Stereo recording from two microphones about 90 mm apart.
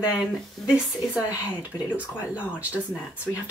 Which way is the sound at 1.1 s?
20° right (ahead or behind).